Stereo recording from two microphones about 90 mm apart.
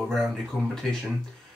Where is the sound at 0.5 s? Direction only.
20° left (ahead or behind).